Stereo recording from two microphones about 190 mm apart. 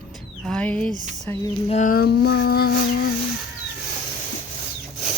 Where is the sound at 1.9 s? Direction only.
55° left (ahead or behind).